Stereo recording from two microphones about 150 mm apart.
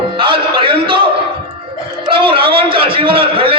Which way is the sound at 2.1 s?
35° right (ahead or behind).